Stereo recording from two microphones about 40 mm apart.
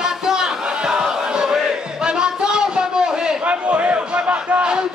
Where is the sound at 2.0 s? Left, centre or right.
Right.